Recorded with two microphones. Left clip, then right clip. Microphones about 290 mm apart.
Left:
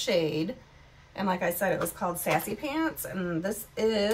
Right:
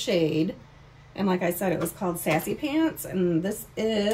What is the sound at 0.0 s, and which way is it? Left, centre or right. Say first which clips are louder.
Speech: right 3 dB; left.